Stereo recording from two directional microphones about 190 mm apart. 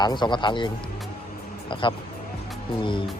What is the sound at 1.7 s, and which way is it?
Speech, 25° left (ahead or behind).